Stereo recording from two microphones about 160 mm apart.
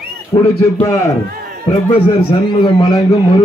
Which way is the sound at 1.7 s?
35° left (ahead or behind).